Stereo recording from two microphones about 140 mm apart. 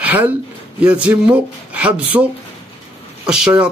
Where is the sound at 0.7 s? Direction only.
10° right (ahead or behind).